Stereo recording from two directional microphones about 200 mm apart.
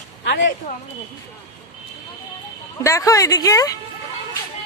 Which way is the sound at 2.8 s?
15° left (ahead or behind).